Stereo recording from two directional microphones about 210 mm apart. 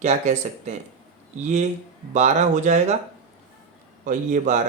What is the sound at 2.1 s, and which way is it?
Speech, 35° right (ahead or behind).